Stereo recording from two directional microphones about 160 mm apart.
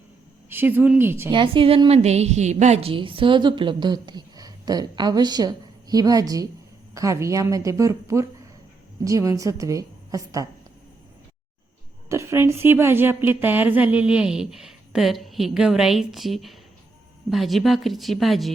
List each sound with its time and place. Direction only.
0.5 s a woman's voice: 15° right (ahead or behind)
1.3 s a woman's voice: 30° right (ahead or behind)
12.0 s a woman's voice: 20° right (ahead or behind); by 18.5 s centre (ahead or behind)